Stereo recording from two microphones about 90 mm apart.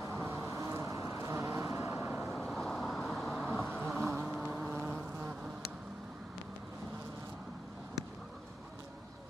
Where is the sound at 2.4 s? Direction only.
5° left (ahead or behind).